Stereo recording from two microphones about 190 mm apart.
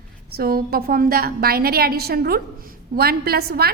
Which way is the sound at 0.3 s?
50° right (ahead or behind).